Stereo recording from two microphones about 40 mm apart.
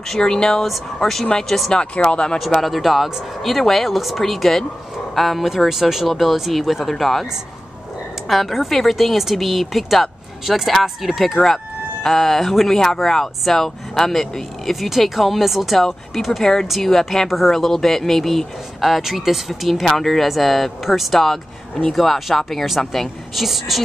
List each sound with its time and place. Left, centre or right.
0.2 s speech: centre
1.7 s speech: left
2.6 s speech: centre
8.3 s speech: centre
11.4 s speech: centre
15.8 s speech: centre
23.3 s speech: centre